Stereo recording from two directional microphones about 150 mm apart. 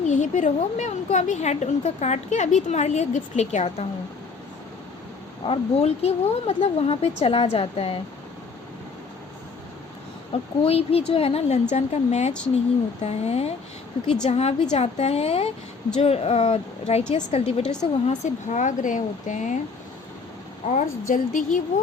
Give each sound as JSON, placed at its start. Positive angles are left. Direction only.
{"t": 0.1, "sound": "a woman's voice", "side_deg": 55}
{"t": 5.5, "sound": "a woman's voice", "side_deg": 45}
{"t": 10.6, "sound": "a woman's voice", "side_deg": 40}
{"t": 20.7, "sound": "speech", "side_deg": 60}